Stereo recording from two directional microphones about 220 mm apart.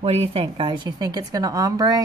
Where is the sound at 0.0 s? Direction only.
25° right (ahead or behind).